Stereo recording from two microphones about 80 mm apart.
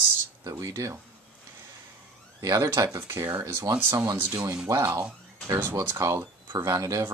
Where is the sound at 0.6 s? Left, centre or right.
Right.